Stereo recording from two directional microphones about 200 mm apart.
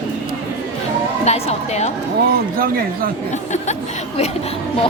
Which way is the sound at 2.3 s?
45° right (ahead or behind).